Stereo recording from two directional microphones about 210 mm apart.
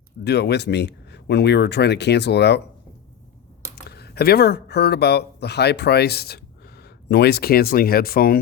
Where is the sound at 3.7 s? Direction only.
50° left (ahead or behind).